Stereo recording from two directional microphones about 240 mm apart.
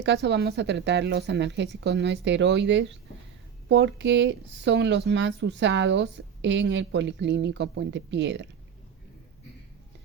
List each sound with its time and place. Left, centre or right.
0.0 s speech: right